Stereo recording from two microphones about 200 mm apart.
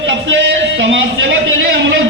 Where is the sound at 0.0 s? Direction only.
65° right (ahead or behind).